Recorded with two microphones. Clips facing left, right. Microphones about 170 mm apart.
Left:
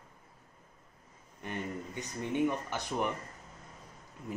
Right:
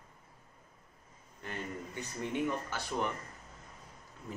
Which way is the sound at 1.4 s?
20° left (ahead or behind).